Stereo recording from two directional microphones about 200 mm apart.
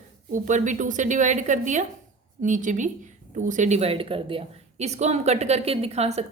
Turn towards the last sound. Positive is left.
turn(degrees=-35)  # may be behind; listen again after turning